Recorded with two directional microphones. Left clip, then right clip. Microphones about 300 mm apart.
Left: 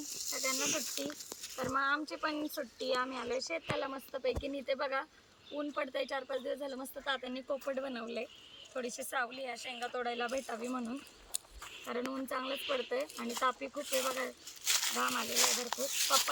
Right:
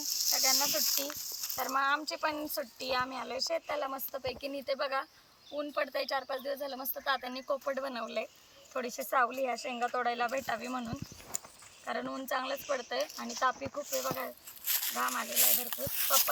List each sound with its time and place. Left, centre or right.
0.0 s snake: centre
1.5 s speech: centre